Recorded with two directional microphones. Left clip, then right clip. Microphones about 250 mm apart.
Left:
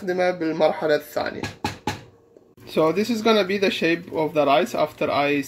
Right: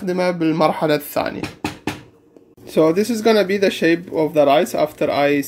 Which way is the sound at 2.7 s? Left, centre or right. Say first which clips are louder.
Right 5 dB; centre.